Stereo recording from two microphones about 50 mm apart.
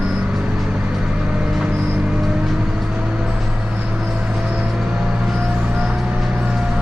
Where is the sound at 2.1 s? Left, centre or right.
Centre.